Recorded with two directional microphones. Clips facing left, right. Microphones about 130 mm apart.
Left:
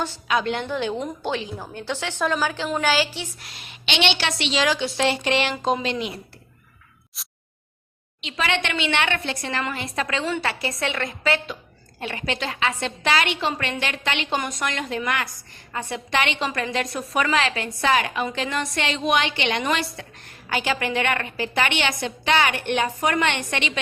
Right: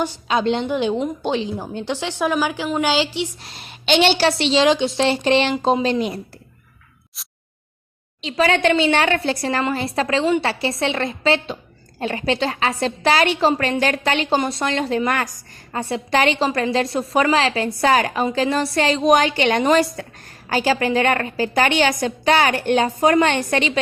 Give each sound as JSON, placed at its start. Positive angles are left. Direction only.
{"t": 0.3, "sound": "a woman's voice", "side_deg": -25}
{"t": 3.4, "sound": "a woman's voice", "side_deg": -35}
{"t": 7.2, "sound": "a sound", "side_deg": 0}
{"t": 8.2, "sound": "a woman's voice", "side_deg": -35}